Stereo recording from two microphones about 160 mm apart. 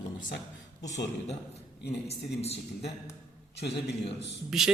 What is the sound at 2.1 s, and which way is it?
Speech, 40° left (ahead or behind).